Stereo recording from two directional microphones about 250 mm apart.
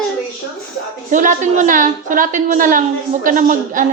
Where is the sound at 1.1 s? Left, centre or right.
Right.